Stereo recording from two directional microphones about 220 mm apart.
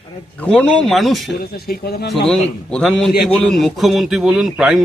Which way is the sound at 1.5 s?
45° left (ahead or behind).